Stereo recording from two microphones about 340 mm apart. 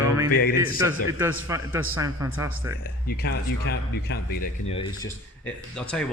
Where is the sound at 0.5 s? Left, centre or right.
Centre.